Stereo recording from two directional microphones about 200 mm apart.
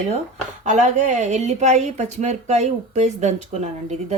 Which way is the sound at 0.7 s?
35° right (ahead or behind).